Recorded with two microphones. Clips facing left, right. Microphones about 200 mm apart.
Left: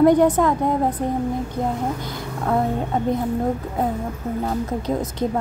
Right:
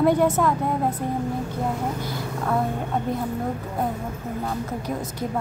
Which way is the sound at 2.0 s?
20° left (ahead or behind).